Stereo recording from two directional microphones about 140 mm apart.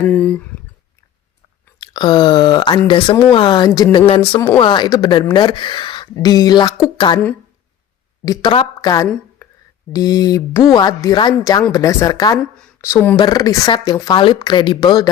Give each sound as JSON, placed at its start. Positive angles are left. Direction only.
{"t": 0.0, "sound": "speech", "side_deg": 10}
{"t": 1.8, "sound": "speech", "side_deg": 30}
{"t": 8.2, "sound": "speech", "side_deg": 30}
{"t": 13.1, "sound": "speech", "side_deg": 30}